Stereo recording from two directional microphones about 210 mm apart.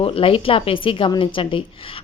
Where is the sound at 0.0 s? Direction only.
25° left (ahead or behind).